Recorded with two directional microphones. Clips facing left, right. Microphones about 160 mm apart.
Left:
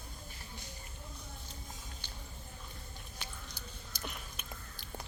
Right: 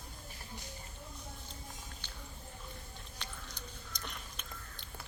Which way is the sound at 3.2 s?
5° left (ahead or behind).